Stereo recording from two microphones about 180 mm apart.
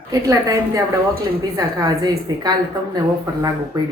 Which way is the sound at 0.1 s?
20° right (ahead or behind).